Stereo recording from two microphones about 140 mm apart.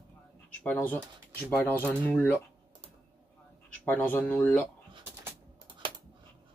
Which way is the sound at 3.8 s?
10° left (ahead or behind).